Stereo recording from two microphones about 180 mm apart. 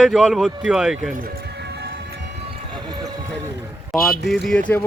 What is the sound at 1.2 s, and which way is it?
Music, 65° right (ahead or behind).